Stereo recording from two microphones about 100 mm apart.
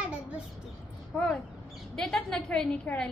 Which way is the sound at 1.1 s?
10° left (ahead or behind).